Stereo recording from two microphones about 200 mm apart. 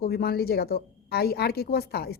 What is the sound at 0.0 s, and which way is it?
A woman's voice, 50° left (ahead or behind).